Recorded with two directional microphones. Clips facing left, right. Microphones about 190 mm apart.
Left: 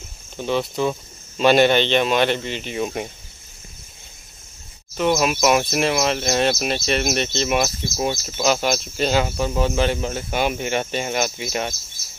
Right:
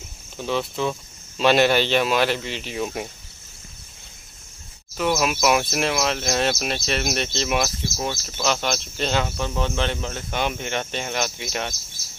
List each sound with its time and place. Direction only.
0.4 s speech: centre (ahead or behind)
4.9 s speech: centre (ahead or behind)
8.0 s speech: 15° left (ahead or behind)